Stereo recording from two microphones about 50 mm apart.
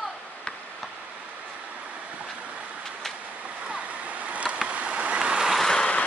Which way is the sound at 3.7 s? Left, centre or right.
Right.